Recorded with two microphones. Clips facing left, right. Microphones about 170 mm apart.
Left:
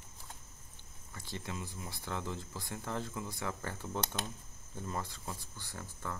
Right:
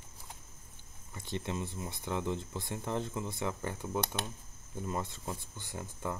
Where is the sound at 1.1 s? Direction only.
20° right (ahead or behind).